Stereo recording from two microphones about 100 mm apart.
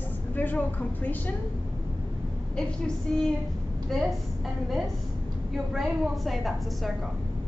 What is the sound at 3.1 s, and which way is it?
Speech, 5° left (ahead or behind).